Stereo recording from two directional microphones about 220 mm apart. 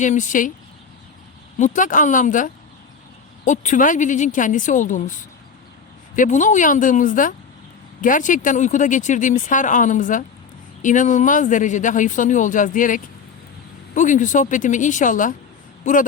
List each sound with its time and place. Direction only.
0.0 s speech: 35° left (ahead or behind)
1.5 s speech: 35° left (ahead or behind)